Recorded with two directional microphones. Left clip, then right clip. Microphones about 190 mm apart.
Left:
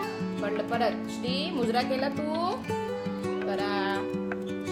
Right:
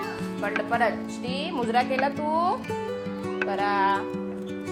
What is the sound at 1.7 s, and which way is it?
Music, 15° left (ahead or behind).